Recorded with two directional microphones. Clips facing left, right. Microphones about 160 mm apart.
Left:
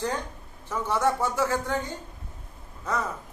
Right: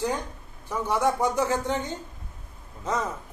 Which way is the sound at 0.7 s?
15° right (ahead or behind).